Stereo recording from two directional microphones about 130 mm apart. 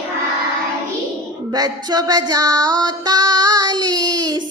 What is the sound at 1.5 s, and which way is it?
Female singing, 30° right (ahead or behind).